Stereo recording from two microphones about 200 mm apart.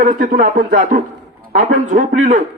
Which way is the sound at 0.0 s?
45° right (ahead or behind).